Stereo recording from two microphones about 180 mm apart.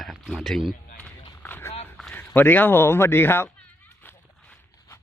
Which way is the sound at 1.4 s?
10° left (ahead or behind).